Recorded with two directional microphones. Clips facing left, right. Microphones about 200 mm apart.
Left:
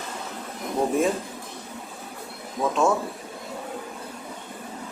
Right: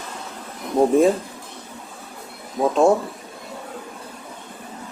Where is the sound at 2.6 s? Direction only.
35° right (ahead or behind).